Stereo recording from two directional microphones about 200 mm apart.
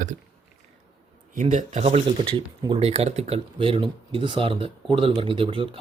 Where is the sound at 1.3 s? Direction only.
35° right (ahead or behind).